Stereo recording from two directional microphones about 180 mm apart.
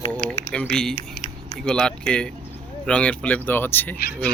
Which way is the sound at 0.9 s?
40° left (ahead or behind).